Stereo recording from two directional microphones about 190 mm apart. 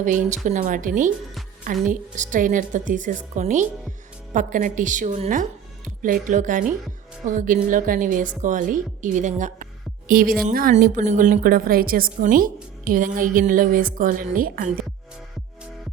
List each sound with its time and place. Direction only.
0.0 s a woman's voice: 40° right (ahead or behind)